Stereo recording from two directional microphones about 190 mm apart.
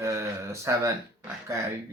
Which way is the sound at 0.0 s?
15° right (ahead or behind).